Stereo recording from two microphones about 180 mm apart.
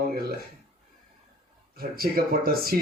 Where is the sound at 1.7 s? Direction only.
55° right (ahead or behind).